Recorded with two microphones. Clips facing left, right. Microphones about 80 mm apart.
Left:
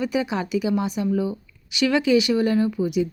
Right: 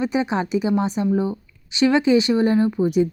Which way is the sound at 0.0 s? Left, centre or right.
Right.